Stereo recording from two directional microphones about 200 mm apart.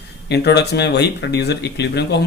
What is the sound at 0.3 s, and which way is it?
Speech, 55° left (ahead or behind).